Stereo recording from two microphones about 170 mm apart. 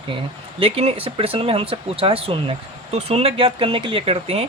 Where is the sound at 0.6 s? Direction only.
35° right (ahead or behind).